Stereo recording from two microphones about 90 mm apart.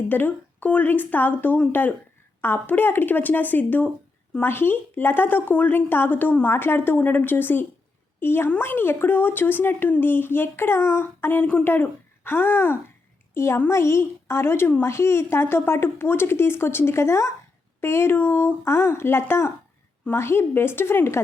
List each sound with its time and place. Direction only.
0.1 s a woman's voice: 20° left (ahead or behind)